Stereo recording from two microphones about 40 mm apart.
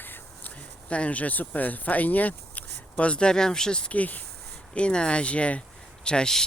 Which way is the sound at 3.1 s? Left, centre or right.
Left.